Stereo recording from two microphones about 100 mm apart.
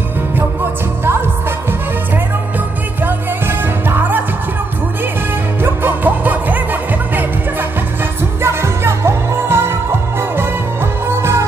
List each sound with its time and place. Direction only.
3.0 s music: 20° right (ahead or behind)
5.6 s music: 20° right (ahead or behind)
8.4 s music: 25° right (ahead or behind)